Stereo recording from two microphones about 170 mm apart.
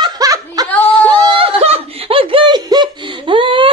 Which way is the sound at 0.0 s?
20° right (ahead or behind).